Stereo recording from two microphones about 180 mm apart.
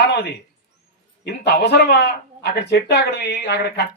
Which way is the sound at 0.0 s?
70° left (ahead or behind).